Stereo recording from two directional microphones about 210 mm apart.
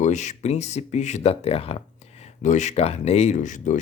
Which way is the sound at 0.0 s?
35° left (ahead or behind).